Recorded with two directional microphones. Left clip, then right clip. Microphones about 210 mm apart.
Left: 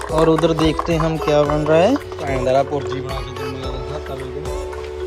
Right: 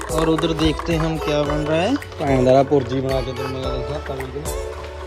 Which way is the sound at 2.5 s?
45° right (ahead or behind).